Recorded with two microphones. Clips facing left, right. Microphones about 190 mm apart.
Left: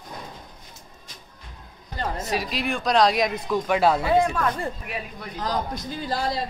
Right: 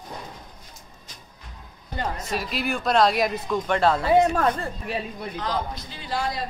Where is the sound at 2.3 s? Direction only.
Centre (ahead or behind).